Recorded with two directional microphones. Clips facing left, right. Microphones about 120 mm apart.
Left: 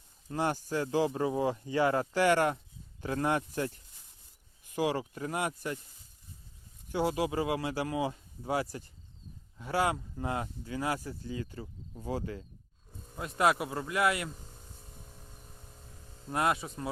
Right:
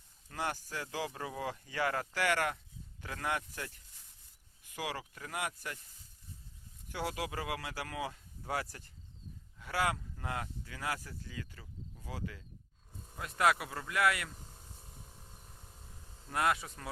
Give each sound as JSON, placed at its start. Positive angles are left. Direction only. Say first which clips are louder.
{"t": 0.3, "sound": "speech", "louder": "left 7 dB", "side_deg": 25}
{"t": 6.9, "sound": "speech", "louder": "left 8 dB", "side_deg": 25}
{"t": 13.1, "sound": "speech", "louder": "left 3 dB", "side_deg": 25}
{"t": 16.3, "sound": "speech", "louder": "left 3 dB", "side_deg": 25}